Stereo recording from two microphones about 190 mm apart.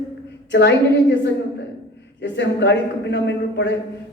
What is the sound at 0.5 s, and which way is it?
A woman's voice, 65° left (ahead or behind).